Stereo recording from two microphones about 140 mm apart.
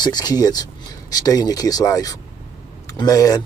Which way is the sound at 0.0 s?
30° left (ahead or behind).